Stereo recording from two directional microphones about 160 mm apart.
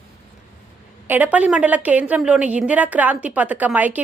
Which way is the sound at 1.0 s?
10° right (ahead or behind).